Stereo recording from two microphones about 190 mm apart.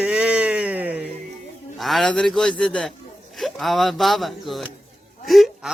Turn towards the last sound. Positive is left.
turn(degrees=0)  # may be behind; listen again after turning